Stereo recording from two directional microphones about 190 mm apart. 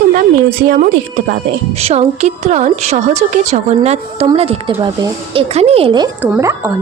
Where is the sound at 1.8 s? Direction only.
35° right (ahead or behind).